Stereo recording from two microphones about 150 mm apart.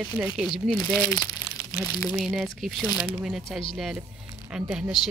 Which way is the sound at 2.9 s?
30° left (ahead or behind).